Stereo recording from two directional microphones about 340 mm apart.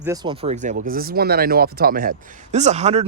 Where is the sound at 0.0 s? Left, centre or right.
Centre.